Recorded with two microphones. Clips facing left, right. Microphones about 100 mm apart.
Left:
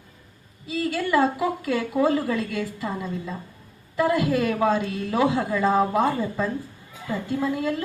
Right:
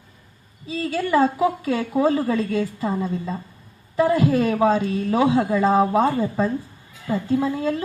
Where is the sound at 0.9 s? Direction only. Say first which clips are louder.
Right 3 dB; 35° right (ahead or behind).